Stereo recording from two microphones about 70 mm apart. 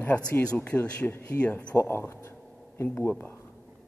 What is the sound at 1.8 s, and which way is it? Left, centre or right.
A woman's voice, left.